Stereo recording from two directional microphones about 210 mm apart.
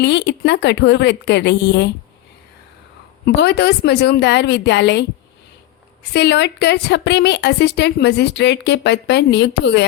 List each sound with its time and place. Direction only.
0.0 s a woman's voice: 55° left (ahead or behind)
3.2 s a woman's voice: 50° left (ahead or behind)
6.1 s a woman's voice: 55° left (ahead or behind)